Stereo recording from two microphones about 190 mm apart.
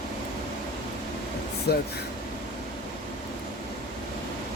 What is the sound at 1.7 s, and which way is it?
Speech, 60° left (ahead or behind).